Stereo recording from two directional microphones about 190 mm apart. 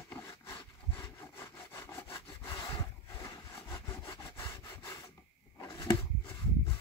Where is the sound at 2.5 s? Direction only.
20° left (ahead or behind).